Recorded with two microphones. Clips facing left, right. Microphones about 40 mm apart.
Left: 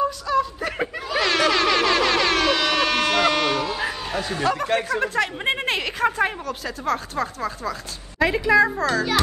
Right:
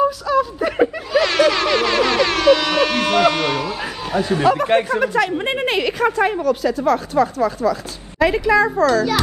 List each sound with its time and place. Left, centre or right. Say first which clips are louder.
0.3 s snicker: right 4 dB; centre
4.3 s a man's voice: right 7 dB; centre
4.6 s speech: right 6 dB; right
4.9 s a man's voice: right 5 dB; centre
8.8 s a child's voice: right 6 dB; centre